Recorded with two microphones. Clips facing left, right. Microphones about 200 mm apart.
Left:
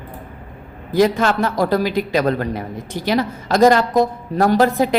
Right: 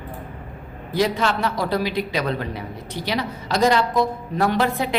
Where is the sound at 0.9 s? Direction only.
50° left (ahead or behind).